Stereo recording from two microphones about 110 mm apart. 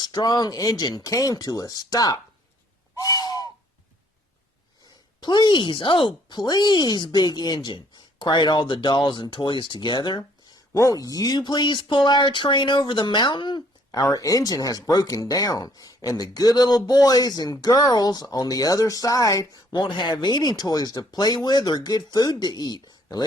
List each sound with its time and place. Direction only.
0.0 s speech: 40° left (ahead or behind)
3.0 s crow: 35° left (ahead or behind)
5.2 s speech: 45° left (ahead or behind)
10.8 s speech: 30° left (ahead or behind)
14.1 s speech: 30° left (ahead or behind)